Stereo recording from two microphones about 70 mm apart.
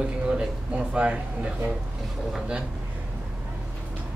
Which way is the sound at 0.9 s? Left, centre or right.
Centre.